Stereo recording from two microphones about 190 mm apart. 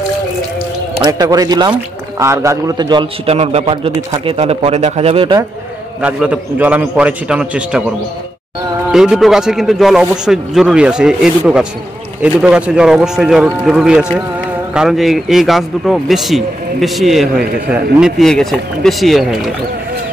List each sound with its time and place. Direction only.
1.0 s a man's voice: 20° right (ahead or behind)
5.9 s a man's voice: 5° right (ahead or behind)
8.9 s a man's voice: centre (ahead or behind)